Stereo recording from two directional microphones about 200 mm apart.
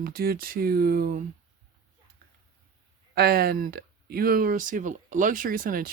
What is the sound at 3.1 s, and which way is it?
Speech, 50° right (ahead or behind).